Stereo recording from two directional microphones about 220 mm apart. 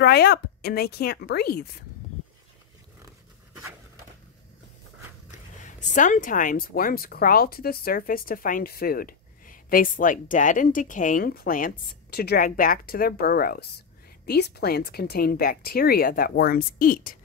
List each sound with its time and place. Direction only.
0.0 s speech: 45° left (ahead or behind)
5.6 s speech: 35° left (ahead or behind)